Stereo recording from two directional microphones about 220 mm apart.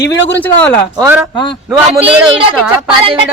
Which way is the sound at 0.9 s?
10° right (ahead or behind).